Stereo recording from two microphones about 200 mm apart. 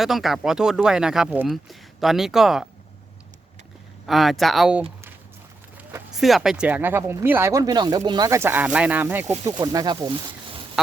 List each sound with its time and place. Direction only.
0.0 s speech: centre (ahead or behind)
4.0 s speech: centre (ahead or behind); by 10.6 s 25° right (ahead or behind)